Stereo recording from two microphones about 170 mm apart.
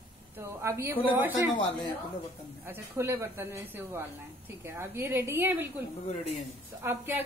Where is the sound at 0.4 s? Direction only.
15° right (ahead or behind).